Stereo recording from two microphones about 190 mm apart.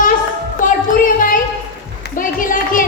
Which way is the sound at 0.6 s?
45° left (ahead or behind).